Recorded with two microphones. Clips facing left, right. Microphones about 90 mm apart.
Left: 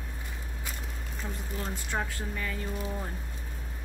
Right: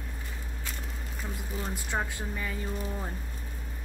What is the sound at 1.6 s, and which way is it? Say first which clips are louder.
Speech: right 1 dB; 15° right (ahead or behind).